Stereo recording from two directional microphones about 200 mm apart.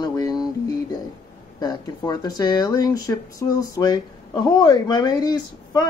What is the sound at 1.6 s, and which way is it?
Speech, 20° left (ahead or behind).